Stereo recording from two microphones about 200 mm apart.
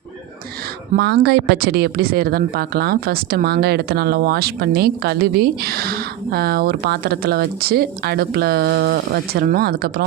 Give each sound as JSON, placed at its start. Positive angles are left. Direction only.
{"t": 0.9, "sound": "speech", "side_deg": -55}